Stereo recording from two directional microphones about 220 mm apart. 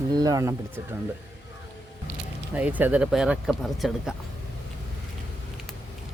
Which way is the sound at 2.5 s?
5° right (ahead or behind).